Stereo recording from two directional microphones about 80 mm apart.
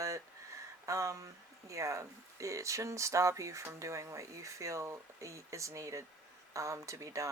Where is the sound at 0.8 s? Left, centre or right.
Right.